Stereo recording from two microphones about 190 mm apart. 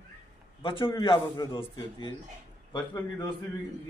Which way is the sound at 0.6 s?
25° left (ahead or behind).